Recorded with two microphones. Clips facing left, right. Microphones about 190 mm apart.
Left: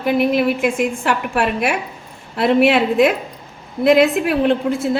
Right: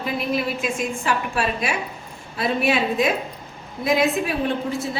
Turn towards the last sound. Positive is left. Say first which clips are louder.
# left 7 dB
turn(degrees=60)  # may be behind; listen again after turning